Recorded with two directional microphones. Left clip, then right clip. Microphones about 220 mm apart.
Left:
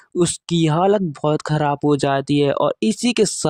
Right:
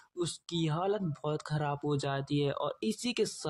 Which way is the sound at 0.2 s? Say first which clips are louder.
Left 16 dB; 45° left (ahead or behind).